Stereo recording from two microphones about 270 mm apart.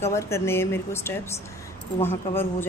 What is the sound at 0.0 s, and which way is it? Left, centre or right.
A woman's voice, centre.